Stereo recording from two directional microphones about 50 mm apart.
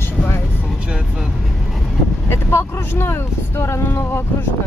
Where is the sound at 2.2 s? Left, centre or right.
Left.